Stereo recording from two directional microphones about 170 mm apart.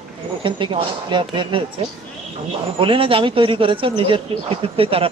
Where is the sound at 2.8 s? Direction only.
30° right (ahead or behind).